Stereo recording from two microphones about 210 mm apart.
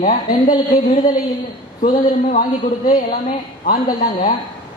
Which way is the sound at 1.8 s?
40° left (ahead or behind).